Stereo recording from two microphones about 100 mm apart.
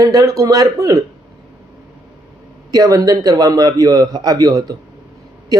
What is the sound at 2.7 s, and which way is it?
A man's voice, 40° right (ahead or behind).